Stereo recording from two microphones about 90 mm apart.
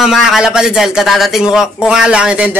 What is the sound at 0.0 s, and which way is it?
A man's voice, 5° right (ahead or behind).